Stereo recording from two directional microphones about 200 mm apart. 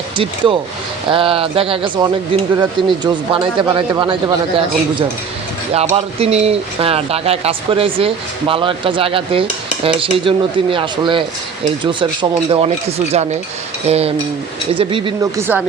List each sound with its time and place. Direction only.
0.2 s speech: 25° right (ahead or behind)
13.8 s cutlery: 30° right (ahead or behind)
14.8 s speech: 25° right (ahead or behind)
15.4 s speech: 10° right (ahead or behind)